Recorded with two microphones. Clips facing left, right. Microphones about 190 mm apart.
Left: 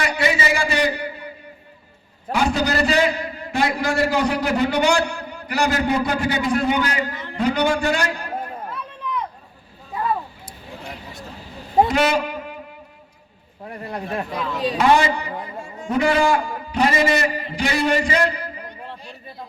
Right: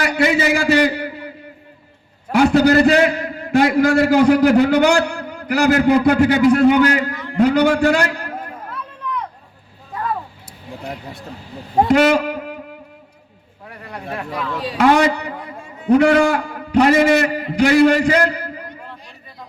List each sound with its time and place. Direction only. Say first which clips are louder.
0.2 s a man's voice: right 6 dB; 60° right (ahead or behind)
2.3 s a man's voice: right 8 dB; 65° right (ahead or behind)
11.9 s a man's voice: right 6 dB; 60° right (ahead or behind)
13.7 s speech: left 2 dB; 25° left (ahead or behind)
14.8 s a man's voice: right 4 dB; 65° right (ahead or behind)
18.9 s a sound: left 2 dB; 30° left (ahead or behind)